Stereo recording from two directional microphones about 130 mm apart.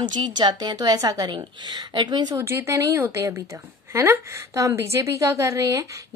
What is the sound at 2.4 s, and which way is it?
A woman's voice, 20° right (ahead or behind).